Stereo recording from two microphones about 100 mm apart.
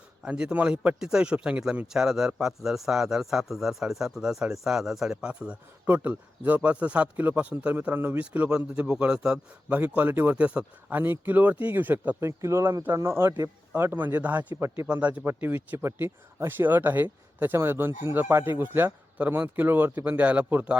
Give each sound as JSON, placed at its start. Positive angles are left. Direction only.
{"t": 0.3, "sound": "a man's voice", "side_deg": -10}
{"t": 12.4, "sound": "speech", "side_deg": -30}
{"t": 14.5, "sound": "speech", "side_deg": -25}
{"t": 14.8, "sound": "a man's voice", "side_deg": -15}